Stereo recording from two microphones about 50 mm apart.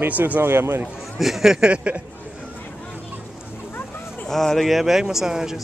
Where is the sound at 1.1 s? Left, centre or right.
Centre.